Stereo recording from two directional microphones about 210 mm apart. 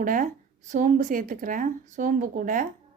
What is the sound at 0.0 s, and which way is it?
A woman's voice, 40° right (ahead or behind).